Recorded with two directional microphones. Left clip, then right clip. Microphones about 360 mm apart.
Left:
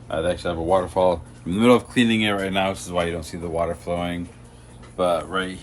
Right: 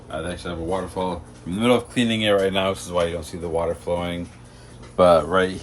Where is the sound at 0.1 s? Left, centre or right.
Centre.